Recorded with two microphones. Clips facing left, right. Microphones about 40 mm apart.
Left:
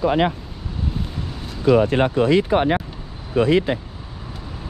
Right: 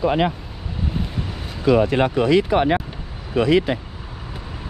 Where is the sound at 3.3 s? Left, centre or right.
Right.